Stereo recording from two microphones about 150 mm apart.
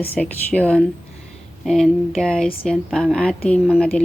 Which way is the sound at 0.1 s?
10° left (ahead or behind).